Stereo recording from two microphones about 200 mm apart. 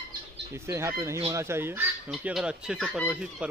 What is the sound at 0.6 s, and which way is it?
Speech, 15° right (ahead or behind).